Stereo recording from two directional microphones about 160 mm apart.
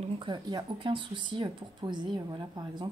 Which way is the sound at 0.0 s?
30° right (ahead or behind).